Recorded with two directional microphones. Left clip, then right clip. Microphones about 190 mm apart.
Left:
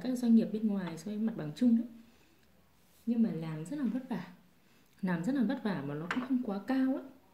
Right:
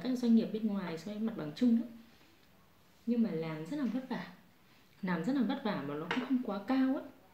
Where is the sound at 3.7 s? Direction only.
50° left (ahead or behind).